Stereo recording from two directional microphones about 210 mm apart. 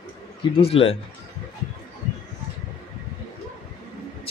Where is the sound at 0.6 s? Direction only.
30° left (ahead or behind).